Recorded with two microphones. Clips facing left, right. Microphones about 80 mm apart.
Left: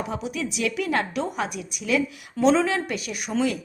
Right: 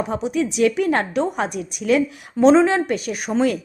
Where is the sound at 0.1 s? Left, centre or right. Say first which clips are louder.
Right 7 dB; right.